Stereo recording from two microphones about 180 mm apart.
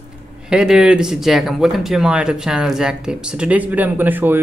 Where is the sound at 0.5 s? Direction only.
5° right (ahead or behind).